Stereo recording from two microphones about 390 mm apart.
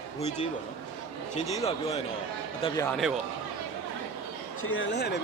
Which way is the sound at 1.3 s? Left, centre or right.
Centre.